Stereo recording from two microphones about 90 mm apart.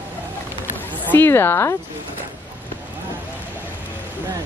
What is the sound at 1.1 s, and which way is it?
Speech, 25° left (ahead or behind).